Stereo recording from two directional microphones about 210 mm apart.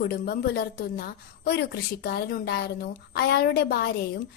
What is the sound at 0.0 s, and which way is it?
A woman's voice, 45° left (ahead or behind).